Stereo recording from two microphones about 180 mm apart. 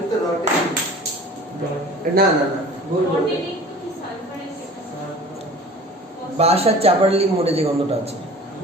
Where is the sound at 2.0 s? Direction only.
55° right (ahead or behind).